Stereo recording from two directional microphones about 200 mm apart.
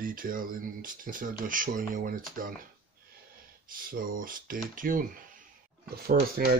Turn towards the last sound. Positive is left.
turn(degrees=-50)  # may be behind; listen again after turning